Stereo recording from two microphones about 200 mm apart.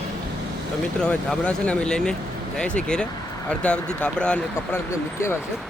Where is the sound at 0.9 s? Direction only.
5° left (ahead or behind).